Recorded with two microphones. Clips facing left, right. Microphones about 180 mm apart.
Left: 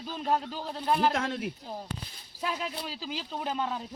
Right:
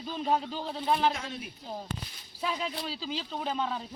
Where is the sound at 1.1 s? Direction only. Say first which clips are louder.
Left 7 dB; 80° left.